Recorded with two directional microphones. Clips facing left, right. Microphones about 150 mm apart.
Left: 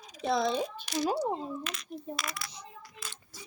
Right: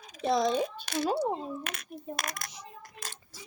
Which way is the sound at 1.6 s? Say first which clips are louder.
Left 1 dB; 60° right (ahead or behind).